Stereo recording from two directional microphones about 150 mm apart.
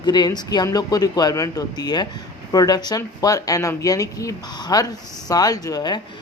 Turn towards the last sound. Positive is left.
turn(degrees=25)  # may be behind; listen again after turning